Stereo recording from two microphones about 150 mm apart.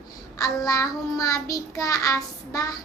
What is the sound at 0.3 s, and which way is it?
Child singing, 20° left (ahead or behind).